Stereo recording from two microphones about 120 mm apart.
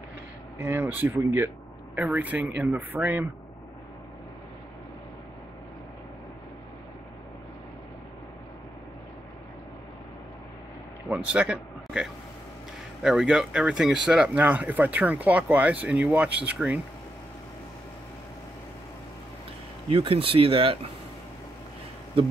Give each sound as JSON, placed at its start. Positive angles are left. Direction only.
{"t": 0.6, "sound": "speech", "side_deg": -20}
{"t": 11.1, "sound": "speech", "side_deg": -10}
{"t": 19.9, "sound": "speech", "side_deg": -50}